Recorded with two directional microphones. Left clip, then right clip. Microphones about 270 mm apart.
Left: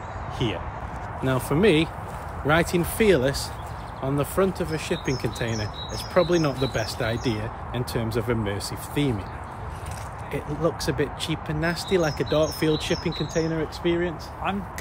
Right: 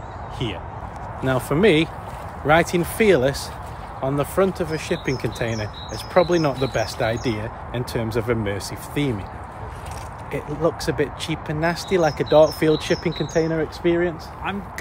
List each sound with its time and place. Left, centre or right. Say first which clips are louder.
1.2 s speech: right 3 dB; centre
10.3 s speech: right 4 dB; centre